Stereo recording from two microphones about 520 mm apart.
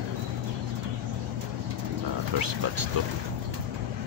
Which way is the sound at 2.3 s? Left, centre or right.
Right.